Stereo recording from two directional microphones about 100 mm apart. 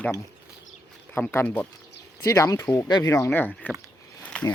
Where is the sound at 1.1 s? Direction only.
20° left (ahead or behind).